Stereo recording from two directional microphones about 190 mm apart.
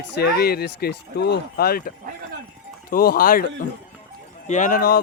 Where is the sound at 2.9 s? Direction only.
50° left (ahead or behind).